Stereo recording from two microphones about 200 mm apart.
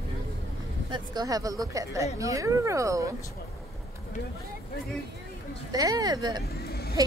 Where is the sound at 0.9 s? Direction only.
20° right (ahead or behind).